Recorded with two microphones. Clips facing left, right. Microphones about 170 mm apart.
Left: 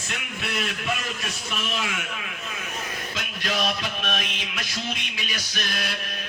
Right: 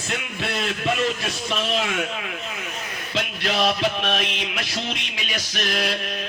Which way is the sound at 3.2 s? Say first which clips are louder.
Right 6 dB; 30° right (ahead or behind).